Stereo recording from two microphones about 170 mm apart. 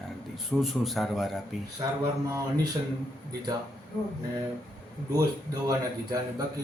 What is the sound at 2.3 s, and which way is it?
Speech, 20° right (ahead or behind).